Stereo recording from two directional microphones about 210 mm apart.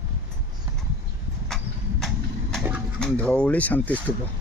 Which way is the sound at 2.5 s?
5° right (ahead or behind).